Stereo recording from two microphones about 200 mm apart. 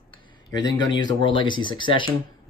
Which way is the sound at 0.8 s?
20° left (ahead or behind).